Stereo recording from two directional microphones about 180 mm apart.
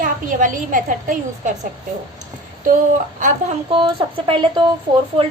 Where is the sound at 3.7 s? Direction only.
30° right (ahead or behind).